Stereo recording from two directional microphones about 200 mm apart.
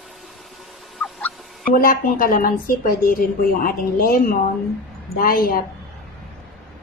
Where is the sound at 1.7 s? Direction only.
45° left (ahead or behind).